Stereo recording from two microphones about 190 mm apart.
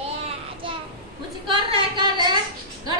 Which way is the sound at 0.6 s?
25° right (ahead or behind).